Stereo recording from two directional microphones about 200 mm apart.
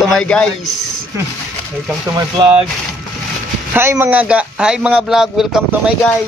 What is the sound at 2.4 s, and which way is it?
Speech, 25° right (ahead or behind).